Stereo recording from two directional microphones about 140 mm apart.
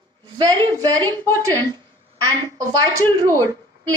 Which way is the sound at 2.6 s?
25° right (ahead or behind).